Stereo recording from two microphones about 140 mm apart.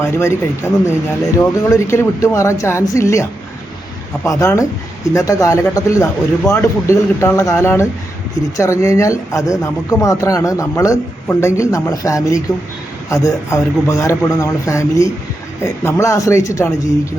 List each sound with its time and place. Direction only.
0.0 s speech: 20° left (ahead or behind)